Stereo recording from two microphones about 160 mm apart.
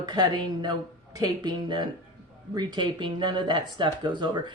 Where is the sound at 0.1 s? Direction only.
25° right (ahead or behind).